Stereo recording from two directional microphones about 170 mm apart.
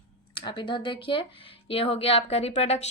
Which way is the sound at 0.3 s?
30° left (ahead or behind).